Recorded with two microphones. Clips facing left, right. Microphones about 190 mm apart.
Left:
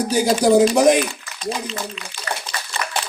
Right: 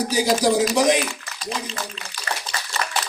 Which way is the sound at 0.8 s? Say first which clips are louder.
Left 4 dB; 55° left (ahead or behind).